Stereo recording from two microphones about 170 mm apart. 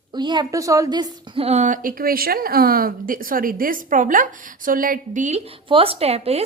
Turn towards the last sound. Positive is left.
turn(degrees=-35)  # may be behind; listen again after turning